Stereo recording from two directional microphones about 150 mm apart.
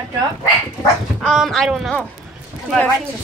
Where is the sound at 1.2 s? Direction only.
5° left (ahead or behind).